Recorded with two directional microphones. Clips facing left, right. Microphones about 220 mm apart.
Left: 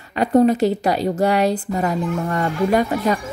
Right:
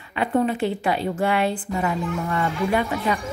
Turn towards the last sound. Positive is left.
turn(degrees=40)  # may be behind; listen again after turning